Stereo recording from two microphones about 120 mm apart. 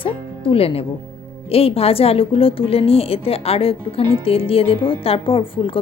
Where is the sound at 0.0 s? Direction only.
50° left (ahead or behind).